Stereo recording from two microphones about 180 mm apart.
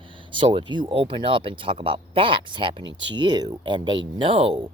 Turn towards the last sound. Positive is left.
turn(degrees=-30)  # may be behind; listen again after turning